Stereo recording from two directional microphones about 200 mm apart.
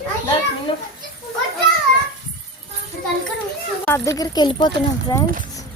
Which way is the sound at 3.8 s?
15° left (ahead or behind).